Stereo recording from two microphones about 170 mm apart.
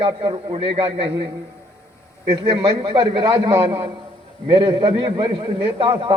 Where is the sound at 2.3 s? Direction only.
30° right (ahead or behind).